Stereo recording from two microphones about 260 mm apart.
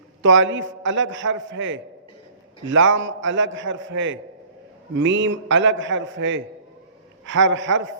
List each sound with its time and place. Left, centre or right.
0.2 s a man's voice: right